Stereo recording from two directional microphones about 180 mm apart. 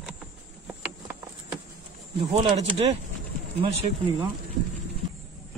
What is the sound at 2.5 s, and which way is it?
Speech, 35° right (ahead or behind).